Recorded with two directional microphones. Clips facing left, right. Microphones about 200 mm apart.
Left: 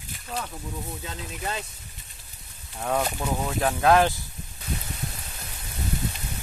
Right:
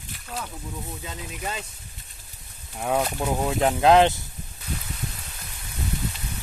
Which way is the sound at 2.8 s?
10° right (ahead or behind).